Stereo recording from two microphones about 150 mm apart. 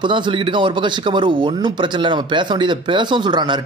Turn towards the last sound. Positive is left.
turn(degrees=-30)  # may be behind; listen again after turning